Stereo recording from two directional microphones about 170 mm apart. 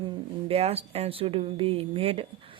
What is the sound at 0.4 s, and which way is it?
Speech, 35° right (ahead or behind).